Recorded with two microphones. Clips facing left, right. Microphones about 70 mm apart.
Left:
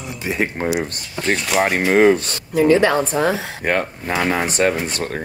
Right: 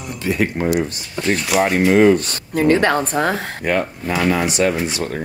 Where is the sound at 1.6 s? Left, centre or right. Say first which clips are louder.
Right 1 dB; left.